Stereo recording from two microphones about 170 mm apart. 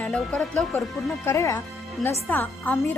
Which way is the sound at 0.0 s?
5° left (ahead or behind).